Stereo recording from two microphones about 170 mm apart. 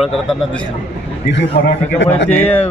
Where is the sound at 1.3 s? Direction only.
90° left.